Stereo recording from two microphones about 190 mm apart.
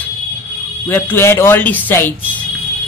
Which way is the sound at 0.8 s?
10° left (ahead or behind).